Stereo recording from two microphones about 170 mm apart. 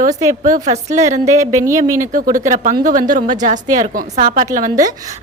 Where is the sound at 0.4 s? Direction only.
50° right (ahead or behind).